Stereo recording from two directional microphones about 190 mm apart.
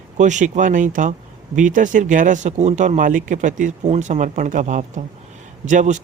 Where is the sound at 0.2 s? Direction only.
40° right (ahead or behind).